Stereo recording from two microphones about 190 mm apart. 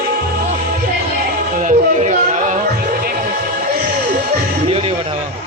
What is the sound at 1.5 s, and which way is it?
Music, 40° right (ahead or behind).